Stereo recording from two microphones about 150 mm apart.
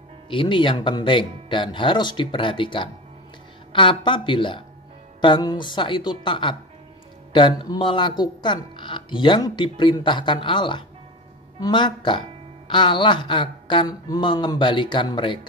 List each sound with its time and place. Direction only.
0.3 s speech: 35° left (ahead or behind)